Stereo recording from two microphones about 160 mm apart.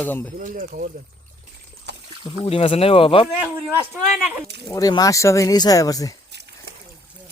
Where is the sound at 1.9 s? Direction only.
90° right.